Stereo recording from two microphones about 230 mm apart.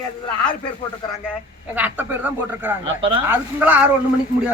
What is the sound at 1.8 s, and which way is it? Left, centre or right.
Speech, centre.